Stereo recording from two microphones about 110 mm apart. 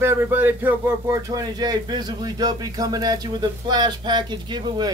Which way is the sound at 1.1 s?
35° right (ahead or behind).